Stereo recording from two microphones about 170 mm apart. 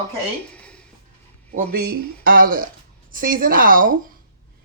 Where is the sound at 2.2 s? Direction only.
55° right (ahead or behind).